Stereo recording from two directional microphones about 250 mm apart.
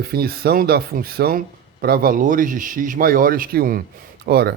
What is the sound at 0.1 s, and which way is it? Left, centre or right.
A man's voice, right.